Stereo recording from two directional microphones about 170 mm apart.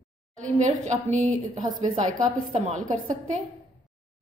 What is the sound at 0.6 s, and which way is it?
A woman's voice, 45° right (ahead or behind).